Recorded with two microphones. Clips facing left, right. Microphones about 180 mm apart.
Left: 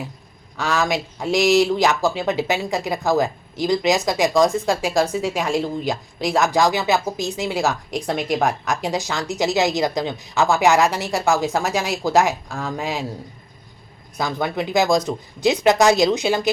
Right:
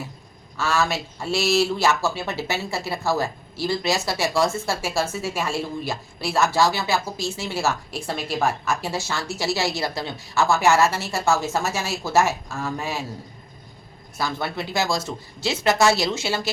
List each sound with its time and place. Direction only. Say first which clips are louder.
0.5 s speech: left 2 dB; 15° left (ahead or behind)
14.2 s speech: left 4 dB; 15° left (ahead or behind)